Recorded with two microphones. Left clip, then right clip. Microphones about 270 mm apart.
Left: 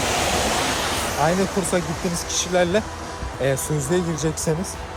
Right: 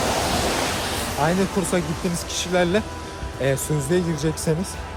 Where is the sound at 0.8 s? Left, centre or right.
Left.